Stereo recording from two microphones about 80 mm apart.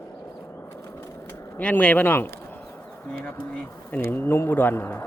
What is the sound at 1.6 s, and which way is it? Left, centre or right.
Speech, centre.